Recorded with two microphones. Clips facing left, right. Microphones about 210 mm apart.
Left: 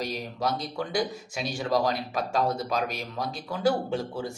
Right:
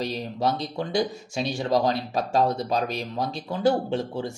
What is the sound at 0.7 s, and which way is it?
Speech, 25° right (ahead or behind).